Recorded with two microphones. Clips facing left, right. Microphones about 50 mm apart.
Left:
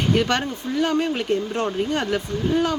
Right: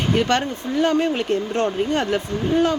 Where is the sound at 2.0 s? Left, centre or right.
Centre.